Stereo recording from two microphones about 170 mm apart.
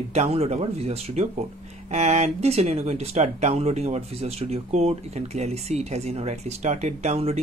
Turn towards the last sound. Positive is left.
turn(degrees=-40)  # may be behind; listen again after turning